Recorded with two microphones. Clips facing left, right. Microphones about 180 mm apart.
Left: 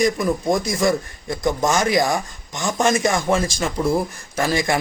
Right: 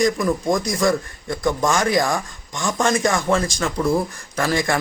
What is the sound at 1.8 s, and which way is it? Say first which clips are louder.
A man's voice: left 1 dB; 15° left (ahead or behind).